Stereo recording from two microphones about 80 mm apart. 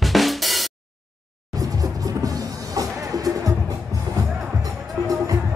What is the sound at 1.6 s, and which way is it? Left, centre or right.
Music, right.